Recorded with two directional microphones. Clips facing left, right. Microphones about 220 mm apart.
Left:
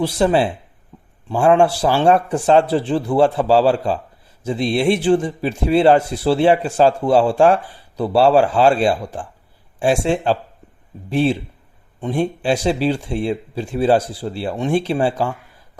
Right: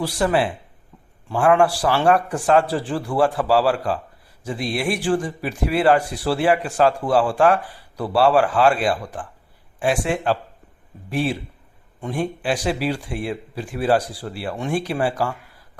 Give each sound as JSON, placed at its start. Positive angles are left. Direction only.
{"t": 0.0, "sound": "a man's voice", "side_deg": 25}